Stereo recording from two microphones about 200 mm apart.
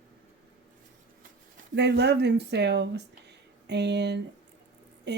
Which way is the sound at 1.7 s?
55° right (ahead or behind).